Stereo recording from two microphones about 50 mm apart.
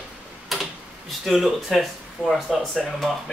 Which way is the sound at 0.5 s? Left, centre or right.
Centre.